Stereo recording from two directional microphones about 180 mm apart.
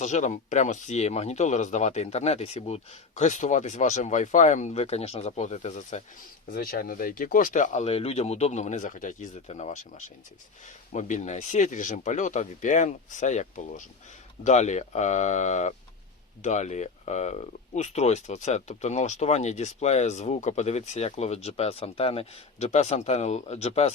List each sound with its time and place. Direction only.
0.0 s speech: 40° left (ahead or behind)
6.5 s speech: 55° left (ahead or behind); by 23.9 s 35° left (ahead or behind)